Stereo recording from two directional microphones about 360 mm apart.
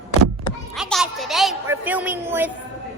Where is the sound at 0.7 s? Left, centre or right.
Centre.